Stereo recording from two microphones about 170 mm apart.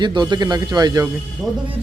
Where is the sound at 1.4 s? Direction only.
Centre (ahead or behind).